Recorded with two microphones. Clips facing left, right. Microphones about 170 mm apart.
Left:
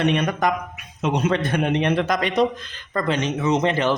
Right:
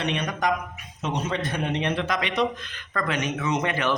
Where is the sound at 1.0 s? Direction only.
60° left (ahead or behind).